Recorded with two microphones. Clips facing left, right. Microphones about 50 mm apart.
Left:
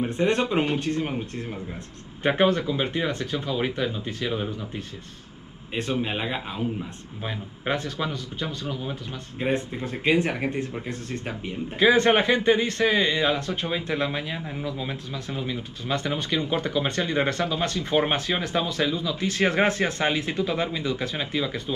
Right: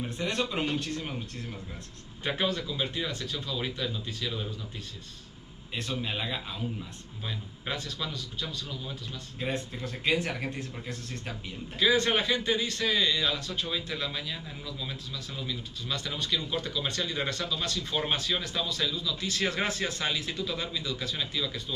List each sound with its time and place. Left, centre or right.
0.0 s speech: left